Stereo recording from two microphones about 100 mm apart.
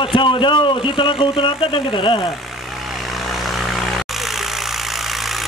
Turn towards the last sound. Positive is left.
turn(degrees=0)  # may be behind; listen again after turning